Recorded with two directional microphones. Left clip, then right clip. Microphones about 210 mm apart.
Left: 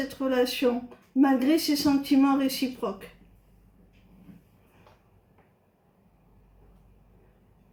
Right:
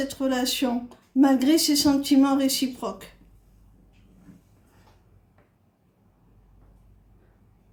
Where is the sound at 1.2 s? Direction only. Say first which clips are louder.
Right 3 dB; 65° right (ahead or behind).